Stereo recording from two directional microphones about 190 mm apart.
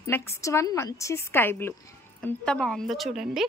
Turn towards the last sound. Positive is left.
turn(degrees=0)  # may be behind; listen again after turning